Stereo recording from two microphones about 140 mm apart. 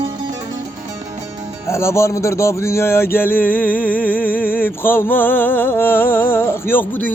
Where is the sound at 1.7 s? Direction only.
20° left (ahead or behind).